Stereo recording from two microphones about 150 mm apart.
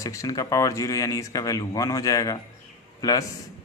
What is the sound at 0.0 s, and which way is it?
A man's voice, 20° left (ahead or behind).